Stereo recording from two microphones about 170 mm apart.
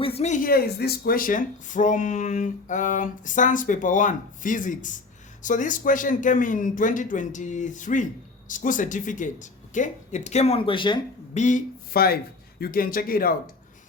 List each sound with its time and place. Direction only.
0.0 s speech: 35° left (ahead or behind)
11.3 s speech: 45° left (ahead or behind)